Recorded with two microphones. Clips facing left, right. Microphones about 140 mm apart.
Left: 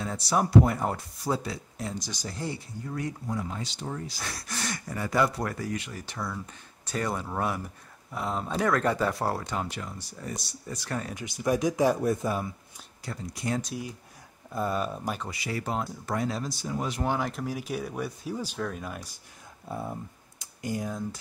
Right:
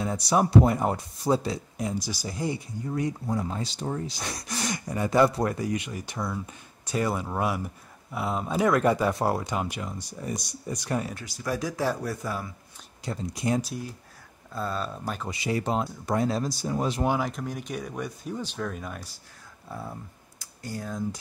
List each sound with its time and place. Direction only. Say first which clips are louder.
0.0 s speech: right 3 dB; 15° right (ahead or behind)
3.3 s speech: right 4 dB; 35° right (ahead or behind)
4.0 s speech: right 3 dB; 20° right (ahead or behind)
11.1 s speech: left 4 dB; 20° left (ahead or behind)
13.0 s speech: right 4 dB; 20° right (ahead or behind)
14.5 s speech: left 2 dB; 15° left (ahead or behind)
15.2 s speech: right 5 dB; 20° right (ahead or behind)
16.3 s speech: right 4 dB; 40° right (ahead or behind)
17.2 s speech: even; centre (ahead or behind)
19.7 s speech: left 3 dB; 20° left (ahead or behind)